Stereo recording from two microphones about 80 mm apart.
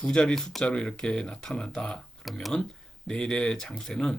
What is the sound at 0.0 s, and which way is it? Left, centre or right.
Speech, centre.